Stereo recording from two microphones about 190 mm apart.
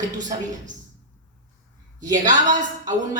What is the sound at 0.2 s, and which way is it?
Speech, 40° right (ahead or behind).